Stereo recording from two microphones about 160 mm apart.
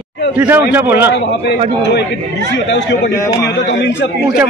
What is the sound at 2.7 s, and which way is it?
Speech, 90° left.